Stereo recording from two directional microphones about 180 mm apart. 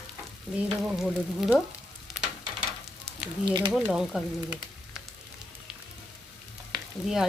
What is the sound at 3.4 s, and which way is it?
Speech, 25° right (ahead or behind).